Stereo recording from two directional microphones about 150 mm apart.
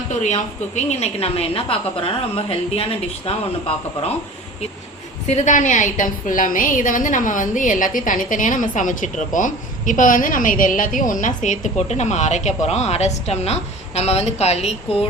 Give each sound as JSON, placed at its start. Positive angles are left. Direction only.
{"t": 0.1, "sound": "a woman's voice", "side_deg": 50}
{"t": 5.3, "sound": "a woman's voice", "side_deg": 60}